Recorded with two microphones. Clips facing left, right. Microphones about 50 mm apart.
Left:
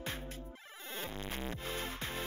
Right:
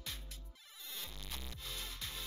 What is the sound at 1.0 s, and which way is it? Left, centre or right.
Music, left.